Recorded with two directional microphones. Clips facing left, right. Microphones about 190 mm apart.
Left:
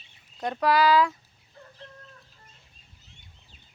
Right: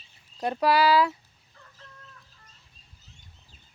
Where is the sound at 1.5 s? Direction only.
35° left (ahead or behind).